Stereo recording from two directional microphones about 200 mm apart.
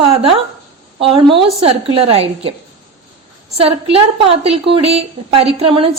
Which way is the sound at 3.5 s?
30° right (ahead or behind).